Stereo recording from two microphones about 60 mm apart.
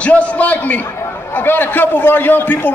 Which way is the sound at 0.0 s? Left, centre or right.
Left.